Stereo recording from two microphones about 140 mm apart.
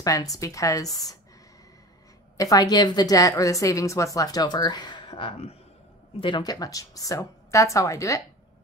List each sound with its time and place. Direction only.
0.0 s a woman's voice: 25° left (ahead or behind)
2.3 s a woman's voice: 25° left (ahead or behind); by 5.6 s 40° left (ahead or behind)
6.2 s a woman's voice: 30° left (ahead or behind)